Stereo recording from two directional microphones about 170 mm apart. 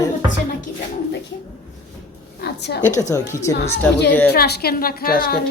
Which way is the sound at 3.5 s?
80° left.